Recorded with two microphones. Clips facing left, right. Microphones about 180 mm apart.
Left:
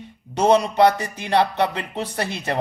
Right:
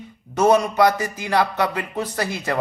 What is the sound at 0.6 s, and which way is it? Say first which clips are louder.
A man's voice: left 1 dB; 30° left (ahead or behind).